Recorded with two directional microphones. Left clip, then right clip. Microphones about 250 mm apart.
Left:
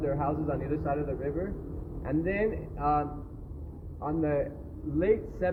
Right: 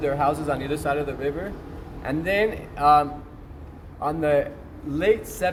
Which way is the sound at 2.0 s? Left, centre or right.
Right.